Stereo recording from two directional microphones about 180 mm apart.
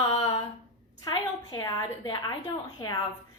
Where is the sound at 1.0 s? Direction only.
20° left (ahead or behind).